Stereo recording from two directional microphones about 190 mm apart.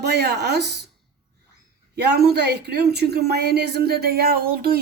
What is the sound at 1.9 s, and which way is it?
A woman's voice, 60° right (ahead or behind).